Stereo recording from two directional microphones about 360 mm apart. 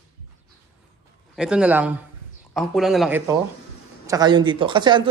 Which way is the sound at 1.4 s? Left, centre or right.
Centre.